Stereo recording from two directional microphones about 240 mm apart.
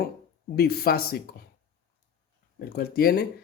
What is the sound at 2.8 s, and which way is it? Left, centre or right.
Speech, left.